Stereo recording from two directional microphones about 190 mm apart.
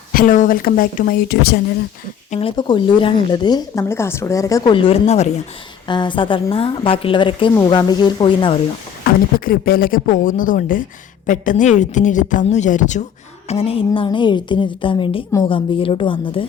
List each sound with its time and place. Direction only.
0.1 s speech: 45° left (ahead or behind)
2.3 s speech: 30° left (ahead or behind)
5.9 s speech: 25° left (ahead or behind)
9.0 s speech: 50° left (ahead or behind); by 16.5 s 25° left (ahead or behind)